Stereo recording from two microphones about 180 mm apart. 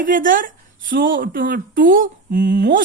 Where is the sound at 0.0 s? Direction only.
50° right (ahead or behind).